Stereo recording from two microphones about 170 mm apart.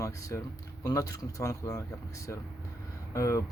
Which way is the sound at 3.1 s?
15° left (ahead or behind).